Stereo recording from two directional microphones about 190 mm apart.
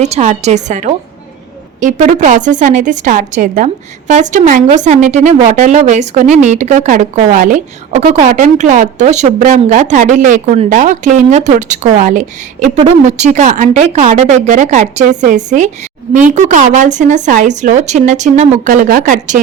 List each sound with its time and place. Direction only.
0.0 s a woman's voice: 40° right (ahead or behind)